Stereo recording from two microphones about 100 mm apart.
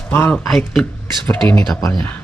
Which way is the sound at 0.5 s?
5° left (ahead or behind).